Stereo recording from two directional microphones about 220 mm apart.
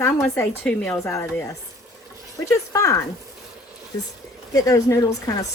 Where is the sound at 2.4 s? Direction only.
15° left (ahead or behind).